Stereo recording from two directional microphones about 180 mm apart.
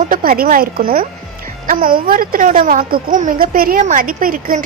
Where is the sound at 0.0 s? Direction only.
50° right (ahead or behind).